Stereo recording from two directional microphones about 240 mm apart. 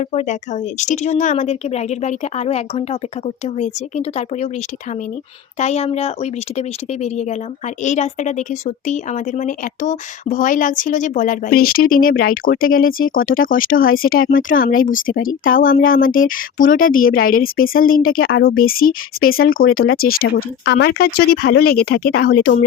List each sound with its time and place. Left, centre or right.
0.0 s a woman's voice: left
5.5 s a woman's voice: left